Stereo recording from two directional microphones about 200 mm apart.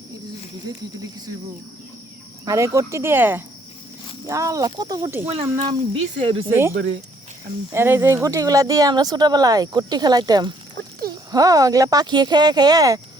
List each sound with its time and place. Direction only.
2.4 s speech: 15° right (ahead or behind)
5.3 s speech: 25° right (ahead or behind)
7.7 s speech: 10° right (ahead or behind)